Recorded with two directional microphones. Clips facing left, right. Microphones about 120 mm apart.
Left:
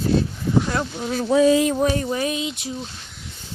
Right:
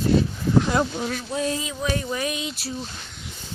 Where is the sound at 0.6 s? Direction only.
20° right (ahead or behind).